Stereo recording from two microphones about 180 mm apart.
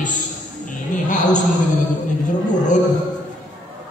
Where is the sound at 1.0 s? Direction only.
45° left (ahead or behind).